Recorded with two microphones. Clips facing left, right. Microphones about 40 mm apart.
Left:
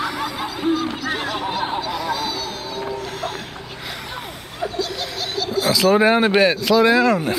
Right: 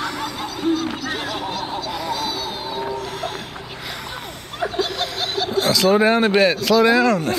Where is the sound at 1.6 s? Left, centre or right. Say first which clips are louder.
Left 3 dB; centre.